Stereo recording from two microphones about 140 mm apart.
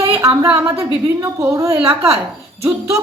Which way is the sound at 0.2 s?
20° right (ahead or behind).